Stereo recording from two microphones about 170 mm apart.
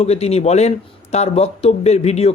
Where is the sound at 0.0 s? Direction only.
40° left (ahead or behind).